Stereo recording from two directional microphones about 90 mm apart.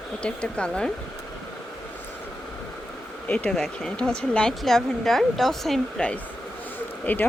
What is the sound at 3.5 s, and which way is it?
Speech, centre (ahead or behind).